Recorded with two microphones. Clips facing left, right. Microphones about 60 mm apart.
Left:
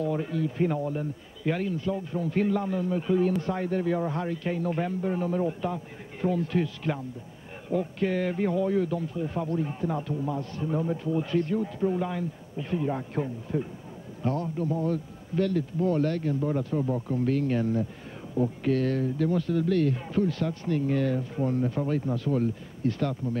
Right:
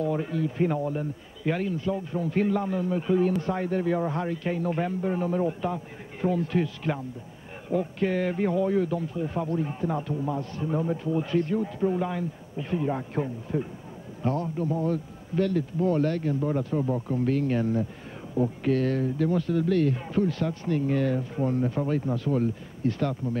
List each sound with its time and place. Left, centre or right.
0.0 s speech: right
18.7 s speech: centre